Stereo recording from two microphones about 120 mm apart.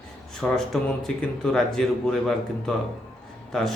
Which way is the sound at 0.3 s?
5° left (ahead or behind).